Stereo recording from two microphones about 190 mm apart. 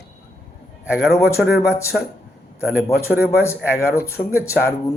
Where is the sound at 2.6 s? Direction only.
5° right (ahead or behind).